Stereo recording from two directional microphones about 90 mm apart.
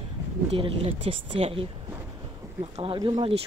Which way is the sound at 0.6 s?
90° right.